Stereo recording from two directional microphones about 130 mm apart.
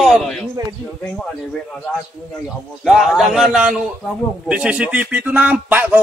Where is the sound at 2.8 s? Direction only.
Centre (ahead or behind).